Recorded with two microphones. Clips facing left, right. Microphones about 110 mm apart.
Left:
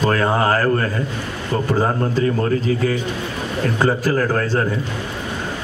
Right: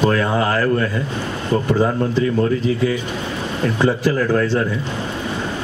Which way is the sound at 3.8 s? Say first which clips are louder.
Right 1 dB; 45° left (ahead or behind).